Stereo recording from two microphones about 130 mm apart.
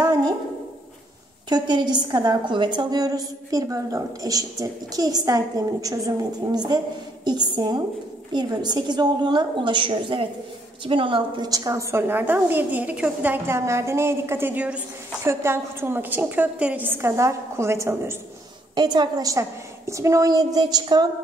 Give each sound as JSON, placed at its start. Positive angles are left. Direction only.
{"t": 1.5, "sound": "a woman's voice", "side_deg": -35}
{"t": 18.8, "sound": "a woman's voice", "side_deg": -35}